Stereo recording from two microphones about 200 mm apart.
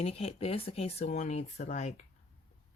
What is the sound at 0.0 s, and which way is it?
Speech, 30° left (ahead or behind).